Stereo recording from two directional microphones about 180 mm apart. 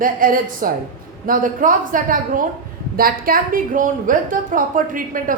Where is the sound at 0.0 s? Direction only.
50° right (ahead or behind).